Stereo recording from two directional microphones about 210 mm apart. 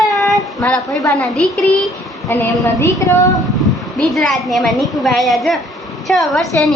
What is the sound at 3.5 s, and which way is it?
A woman's voice, centre (ahead or behind).